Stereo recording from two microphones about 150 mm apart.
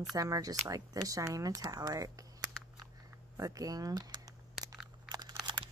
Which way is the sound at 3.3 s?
25° right (ahead or behind).